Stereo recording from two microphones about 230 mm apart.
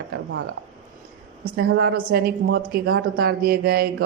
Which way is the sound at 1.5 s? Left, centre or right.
Right.